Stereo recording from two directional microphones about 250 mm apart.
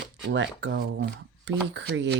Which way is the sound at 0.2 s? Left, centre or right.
Right.